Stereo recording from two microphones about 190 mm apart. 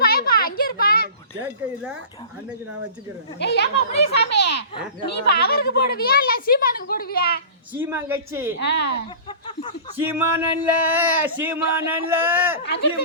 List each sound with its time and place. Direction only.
0.0 s a sound: 50° left (ahead or behind)
3.3 s a woman's voice: 60° left (ahead or behind)
7.7 s speech: 10° right (ahead or behind)
8.5 s a woman's voice: 65° left (ahead or behind)
10.1 s speech: 10° right (ahead or behind)
12.6 s a woman's voice: 60° left (ahead or behind)